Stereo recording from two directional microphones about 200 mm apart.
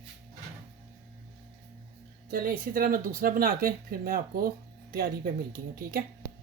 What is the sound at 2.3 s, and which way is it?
Speech, 45° right (ahead or behind).